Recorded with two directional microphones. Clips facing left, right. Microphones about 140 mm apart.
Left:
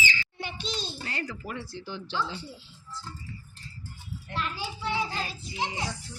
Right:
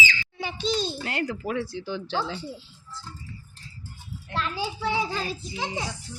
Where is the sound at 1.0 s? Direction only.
60° right (ahead or behind); by 1.8 s 90° right.